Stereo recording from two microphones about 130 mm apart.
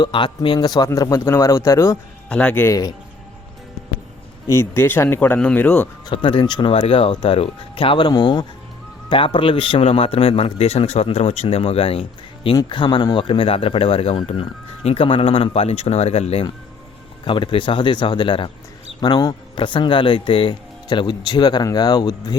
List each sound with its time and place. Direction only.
0.0 s speech: 35° left (ahead or behind)
2.3 s speech: 10° left (ahead or behind)
4.4 s speech: 20° left (ahead or behind)
6.1 s speech: 40° left (ahead or behind)
13.2 s speech: 45° left (ahead or behind)
17.2 s speech: 40° left (ahead or behind)